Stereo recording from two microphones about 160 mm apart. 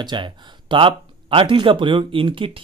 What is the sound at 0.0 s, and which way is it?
Speech, 30° right (ahead or behind).